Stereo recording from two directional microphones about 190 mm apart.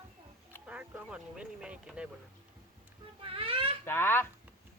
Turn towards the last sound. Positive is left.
turn(degrees=10)  # may be behind; listen again after turning